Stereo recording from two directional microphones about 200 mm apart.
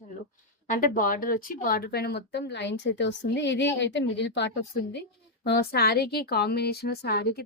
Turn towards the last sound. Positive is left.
turn(degrees=55)  # may be behind; listen again after turning